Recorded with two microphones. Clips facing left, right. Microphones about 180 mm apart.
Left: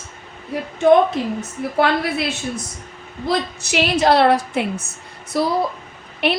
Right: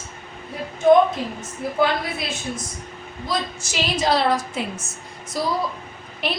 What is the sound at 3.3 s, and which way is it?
A woman's voice, 65° left (ahead or behind).